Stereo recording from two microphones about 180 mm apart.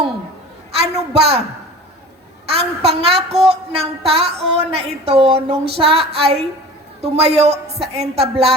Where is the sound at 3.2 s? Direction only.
35° right (ahead or behind).